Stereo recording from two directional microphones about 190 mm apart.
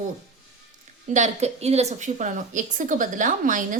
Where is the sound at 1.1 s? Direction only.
35° right (ahead or behind).